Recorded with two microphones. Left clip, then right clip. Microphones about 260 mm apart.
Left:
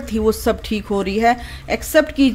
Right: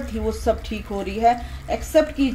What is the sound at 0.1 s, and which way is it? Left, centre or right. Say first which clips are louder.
A woman's voice: left 5 dB; left.